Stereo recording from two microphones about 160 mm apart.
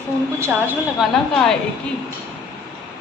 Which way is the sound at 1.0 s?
Centre (ahead or behind).